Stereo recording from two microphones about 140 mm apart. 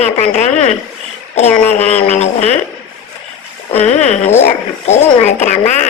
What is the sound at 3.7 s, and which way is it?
A woman's voice, 50° left (ahead or behind).